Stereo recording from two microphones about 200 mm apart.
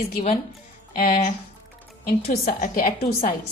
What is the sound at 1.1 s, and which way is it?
Speech, 35° left (ahead or behind).